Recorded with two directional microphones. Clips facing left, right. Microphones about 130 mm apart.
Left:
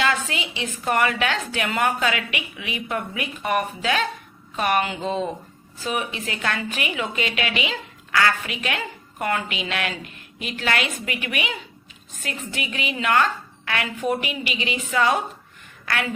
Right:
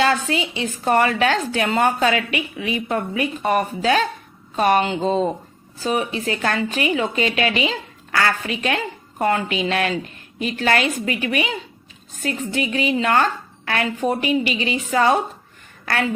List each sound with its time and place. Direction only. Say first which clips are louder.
0.0 s a woman's voice: right 5 dB; 35° right (ahead or behind)